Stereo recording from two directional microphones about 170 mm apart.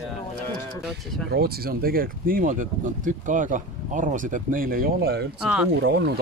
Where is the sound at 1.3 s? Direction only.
65° right (ahead or behind).